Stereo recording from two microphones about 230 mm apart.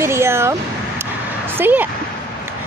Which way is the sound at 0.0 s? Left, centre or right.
Centre.